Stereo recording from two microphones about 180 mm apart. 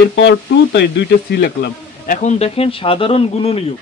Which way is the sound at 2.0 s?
45° left (ahead or behind).